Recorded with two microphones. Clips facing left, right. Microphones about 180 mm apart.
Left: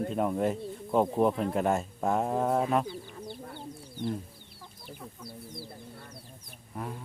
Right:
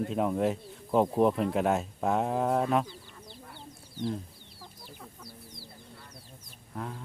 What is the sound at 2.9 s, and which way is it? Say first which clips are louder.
Chicken: left 9 dB; 60° left (ahead or behind).